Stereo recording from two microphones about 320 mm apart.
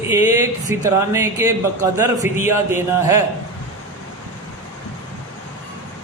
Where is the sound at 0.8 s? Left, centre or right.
Centre.